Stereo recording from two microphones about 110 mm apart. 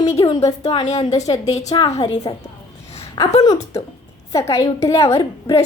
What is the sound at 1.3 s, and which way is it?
A woman's voice, 50° left (ahead or behind).